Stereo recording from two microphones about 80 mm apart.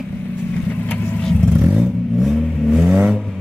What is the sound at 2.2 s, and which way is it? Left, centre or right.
Vehicle, centre.